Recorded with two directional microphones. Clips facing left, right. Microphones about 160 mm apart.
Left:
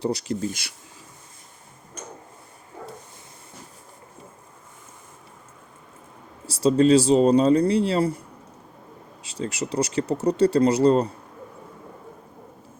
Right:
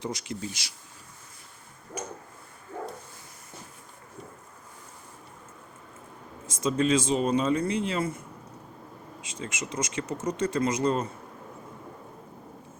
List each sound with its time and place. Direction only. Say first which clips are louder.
0.0 s speech: left 8 dB; 35° left (ahead or behind)
6.4 s speech: left 8 dB; 35° left (ahead or behind)
9.2 s speech: left 8 dB; 35° left (ahead or behind)